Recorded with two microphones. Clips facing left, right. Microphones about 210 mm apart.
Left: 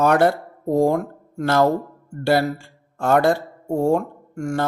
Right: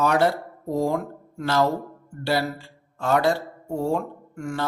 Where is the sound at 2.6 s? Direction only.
50° left (ahead or behind).